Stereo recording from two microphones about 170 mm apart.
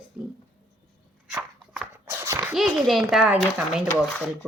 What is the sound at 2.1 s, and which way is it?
Dog, 15° right (ahead or behind).